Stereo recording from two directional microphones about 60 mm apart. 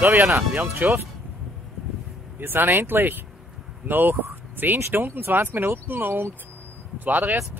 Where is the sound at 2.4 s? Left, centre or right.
Right.